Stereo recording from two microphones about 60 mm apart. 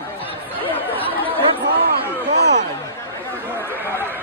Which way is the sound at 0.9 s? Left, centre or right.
Left.